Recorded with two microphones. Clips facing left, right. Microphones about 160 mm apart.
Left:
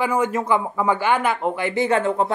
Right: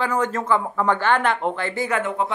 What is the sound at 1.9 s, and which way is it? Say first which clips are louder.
Speech: left 4 dB; 30° left (ahead or behind).